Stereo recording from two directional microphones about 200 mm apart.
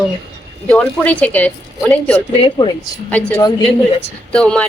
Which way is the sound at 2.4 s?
25° left (ahead or behind).